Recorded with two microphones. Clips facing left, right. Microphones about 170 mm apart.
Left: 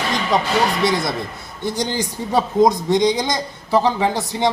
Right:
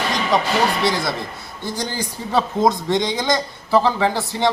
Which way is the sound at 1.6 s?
20° left (ahead or behind).